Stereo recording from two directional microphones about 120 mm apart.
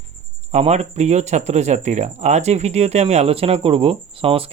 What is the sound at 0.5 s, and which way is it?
Speech, 65° right (ahead or behind).